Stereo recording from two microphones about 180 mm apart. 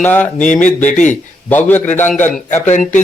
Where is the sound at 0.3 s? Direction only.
45° left (ahead or behind).